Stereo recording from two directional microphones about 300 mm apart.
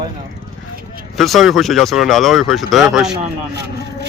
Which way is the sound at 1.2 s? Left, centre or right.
Centre.